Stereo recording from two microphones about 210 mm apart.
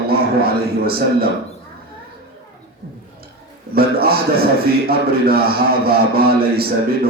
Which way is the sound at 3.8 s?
45° right (ahead or behind).